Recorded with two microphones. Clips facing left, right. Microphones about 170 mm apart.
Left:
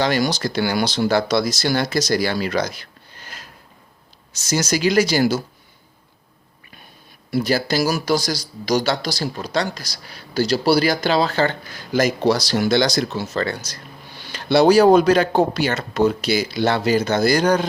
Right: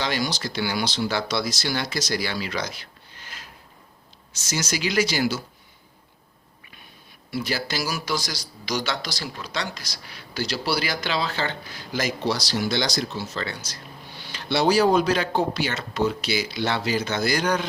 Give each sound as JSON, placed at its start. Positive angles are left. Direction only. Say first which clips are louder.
{"t": 0.0, "sound": "speech", "louder": "left 7 dB", "side_deg": 50}
{"t": 4.4, "sound": "speech", "louder": "left 8 dB", "side_deg": 40}
{"t": 7.3, "sound": "speech", "louder": "left 8 dB", "side_deg": 40}